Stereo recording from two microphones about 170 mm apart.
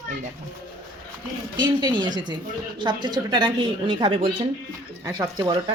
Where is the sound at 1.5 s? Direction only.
25° right (ahead or behind).